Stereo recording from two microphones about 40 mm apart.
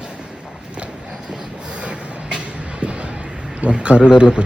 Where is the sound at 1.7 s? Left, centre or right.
Right.